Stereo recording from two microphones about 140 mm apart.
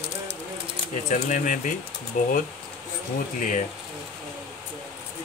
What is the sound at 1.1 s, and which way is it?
Speech, 70° left (ahead or behind).